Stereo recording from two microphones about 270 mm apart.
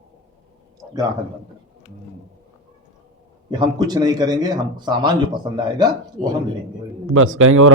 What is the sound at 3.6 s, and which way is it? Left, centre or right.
A man's voice, centre.